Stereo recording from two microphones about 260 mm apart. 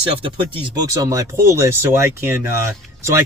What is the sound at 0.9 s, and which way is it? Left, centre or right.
Speech, centre.